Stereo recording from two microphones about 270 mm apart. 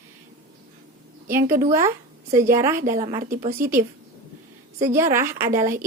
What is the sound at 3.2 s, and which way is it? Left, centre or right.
Speech, right.